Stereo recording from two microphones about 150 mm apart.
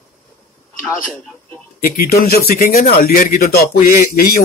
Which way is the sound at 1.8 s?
90° left.